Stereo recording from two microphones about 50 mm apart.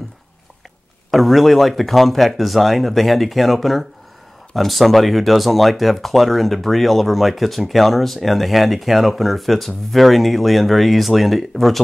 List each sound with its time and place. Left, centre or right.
1.1 s speech: centre